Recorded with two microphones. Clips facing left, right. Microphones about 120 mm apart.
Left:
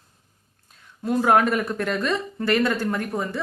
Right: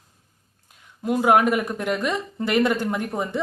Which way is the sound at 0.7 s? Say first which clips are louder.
Even; 15° right (ahead or behind).